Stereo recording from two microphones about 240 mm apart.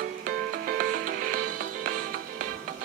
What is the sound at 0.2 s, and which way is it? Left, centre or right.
Music, right.